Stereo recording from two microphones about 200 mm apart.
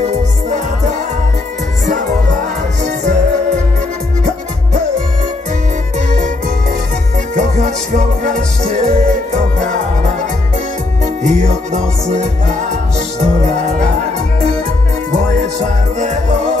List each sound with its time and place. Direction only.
0.0 s music: 35° right (ahead or behind)
7.3 s music: 35° right (ahead or behind)
11.2 s music: 35° right (ahead or behind)
16.0 s music: 35° right (ahead or behind)